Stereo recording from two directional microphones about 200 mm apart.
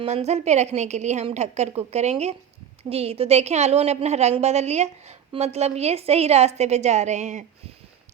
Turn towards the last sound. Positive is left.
turn(degrees=-35)  # may be behind; listen again after turning